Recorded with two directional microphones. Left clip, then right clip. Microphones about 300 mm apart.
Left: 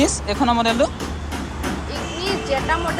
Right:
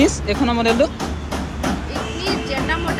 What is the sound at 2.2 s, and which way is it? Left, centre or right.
Music, left.